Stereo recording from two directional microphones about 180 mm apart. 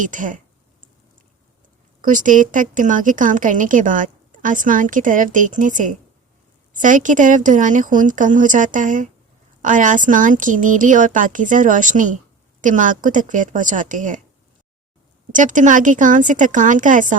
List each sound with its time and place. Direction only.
0.0 s a woman's voice: 45° right (ahead or behind)
2.0 s a woman's voice: 45° right (ahead or behind)
15.3 s a woman's voice: 45° right (ahead or behind)